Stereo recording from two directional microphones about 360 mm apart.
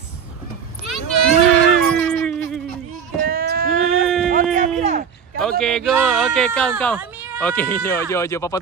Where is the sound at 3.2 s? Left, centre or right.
Right.